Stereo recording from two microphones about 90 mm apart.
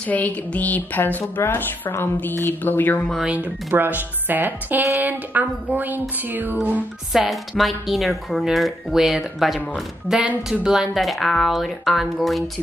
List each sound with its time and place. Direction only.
0.0 s a woman's voice: 15° left (ahead or behind)
3.3 s speech: 15° right (ahead or behind)
7.1 s speech: centre (ahead or behind)